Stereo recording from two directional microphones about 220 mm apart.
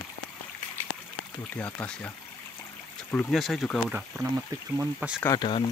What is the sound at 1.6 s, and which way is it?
Speech, 5° left (ahead or behind).